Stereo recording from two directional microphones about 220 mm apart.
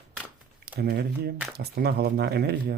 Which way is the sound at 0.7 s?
45° right (ahead or behind).